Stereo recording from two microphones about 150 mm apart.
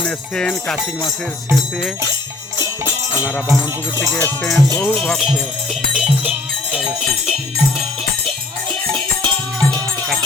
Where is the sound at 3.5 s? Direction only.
20° left (ahead or behind).